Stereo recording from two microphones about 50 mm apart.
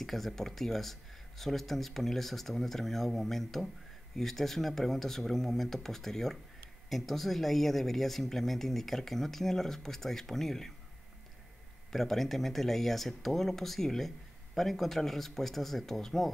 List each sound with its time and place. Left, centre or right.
0.0 s speech: centre
11.9 s speech: centre